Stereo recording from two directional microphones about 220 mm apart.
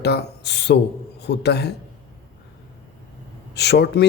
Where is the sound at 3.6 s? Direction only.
50° left (ahead or behind).